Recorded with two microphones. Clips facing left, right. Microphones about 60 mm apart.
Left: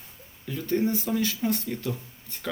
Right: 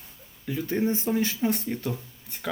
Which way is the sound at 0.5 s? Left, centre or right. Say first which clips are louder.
Left 1 dB; centre.